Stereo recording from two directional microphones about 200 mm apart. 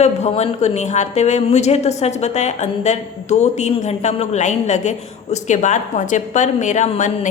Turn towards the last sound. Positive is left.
turn(degrees=35)  # may be behind; listen again after turning